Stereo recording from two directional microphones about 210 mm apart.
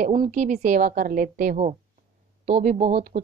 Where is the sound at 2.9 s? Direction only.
40° right (ahead or behind).